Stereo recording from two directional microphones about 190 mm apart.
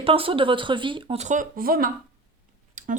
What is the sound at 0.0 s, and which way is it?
A woman's voice, 30° right (ahead or behind).